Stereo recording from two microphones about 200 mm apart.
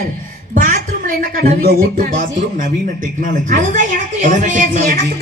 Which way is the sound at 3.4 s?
40° right (ahead or behind).